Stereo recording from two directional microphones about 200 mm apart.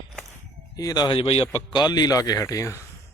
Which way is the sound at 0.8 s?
20° left (ahead or behind).